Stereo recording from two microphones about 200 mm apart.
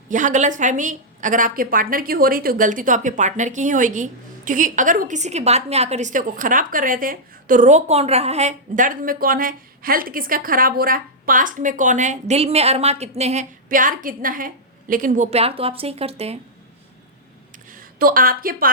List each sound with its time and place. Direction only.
0.1 s a woman's voice: 40° right (ahead or behind)
17.7 s speech: 45° right (ahead or behind)